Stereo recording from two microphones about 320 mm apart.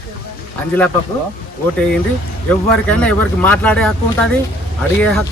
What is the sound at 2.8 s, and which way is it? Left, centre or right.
Speech, centre.